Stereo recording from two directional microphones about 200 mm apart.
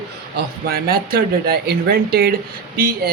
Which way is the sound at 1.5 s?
50° right (ahead or behind).